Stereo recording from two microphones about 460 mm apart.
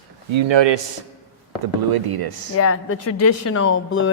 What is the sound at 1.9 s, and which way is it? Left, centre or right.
Speech, right.